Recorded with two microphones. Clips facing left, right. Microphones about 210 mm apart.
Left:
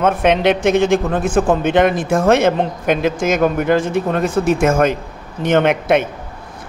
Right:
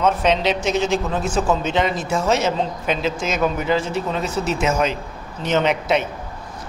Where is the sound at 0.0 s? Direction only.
55° left (ahead or behind).